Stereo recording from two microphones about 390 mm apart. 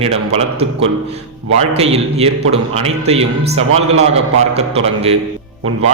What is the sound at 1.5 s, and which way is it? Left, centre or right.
A man's voice, centre.